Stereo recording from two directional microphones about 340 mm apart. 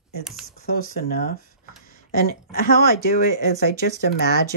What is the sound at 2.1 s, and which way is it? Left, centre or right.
Speech, left.